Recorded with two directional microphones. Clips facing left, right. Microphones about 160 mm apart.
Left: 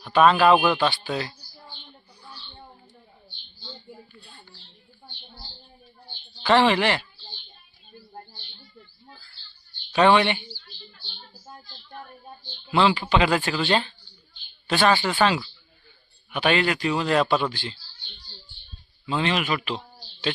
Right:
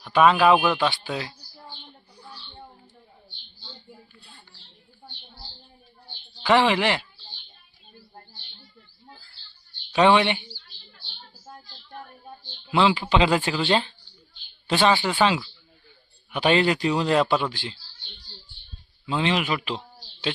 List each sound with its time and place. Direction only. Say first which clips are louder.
0.0 s a man's voice: even; 10° right (ahead or behind)
1.0 s speech: left 2 dB; 10° right (ahead or behind)
6.4 s speech: left 1 dB; 10° right (ahead or behind)
9.9 s speech: even; 15° right (ahead or behind)
12.7 s a man's voice: even; 15° right (ahead or behind)
16.3 s a man's voice: right 2 dB; 25° right (ahead or behind)
19.0 s a man's voice: even; 20° right (ahead or behind)